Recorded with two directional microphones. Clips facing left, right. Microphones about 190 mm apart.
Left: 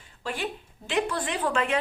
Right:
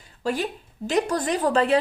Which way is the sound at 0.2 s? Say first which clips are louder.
Right 6 dB; 40° right (ahead or behind).